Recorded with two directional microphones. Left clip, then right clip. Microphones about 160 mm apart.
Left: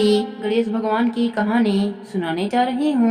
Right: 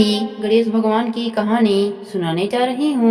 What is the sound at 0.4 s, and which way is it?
Speech, 25° right (ahead or behind).